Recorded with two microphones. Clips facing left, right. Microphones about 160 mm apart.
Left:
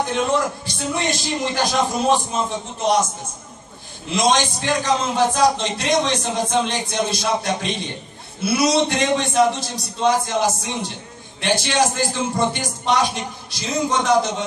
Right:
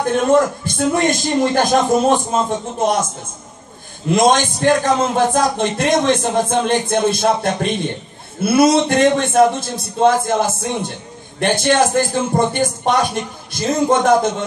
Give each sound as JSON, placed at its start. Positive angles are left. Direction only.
{"t": 0.0, "sound": "a man's voice", "side_deg": -50}
{"t": 4.1, "sound": "a man's voice", "side_deg": -50}